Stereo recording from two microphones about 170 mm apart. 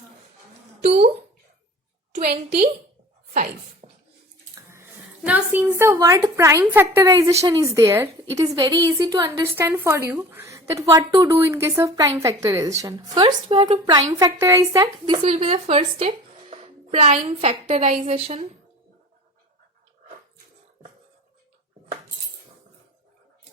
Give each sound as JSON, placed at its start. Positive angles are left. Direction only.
{"t": 2.1, "sound": "a woman's voice", "side_deg": -65}
{"t": 3.3, "sound": "speech", "side_deg": -45}
{"t": 5.2, "sound": "a woman's voice", "side_deg": -10}
{"t": 13.2, "sound": "a woman's voice", "side_deg": -30}
{"t": 14.1, "sound": "speech", "side_deg": -20}
{"t": 17.2, "sound": "a woman's voice", "side_deg": -35}